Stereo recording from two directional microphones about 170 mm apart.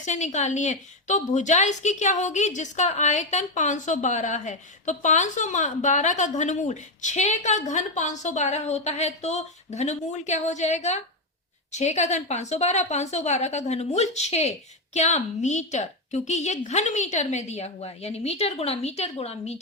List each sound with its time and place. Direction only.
0.0 s a woman's voice: 45° left (ahead or behind)